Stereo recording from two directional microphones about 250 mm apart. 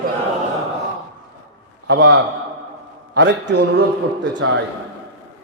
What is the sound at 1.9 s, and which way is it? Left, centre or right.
A man's voice, right.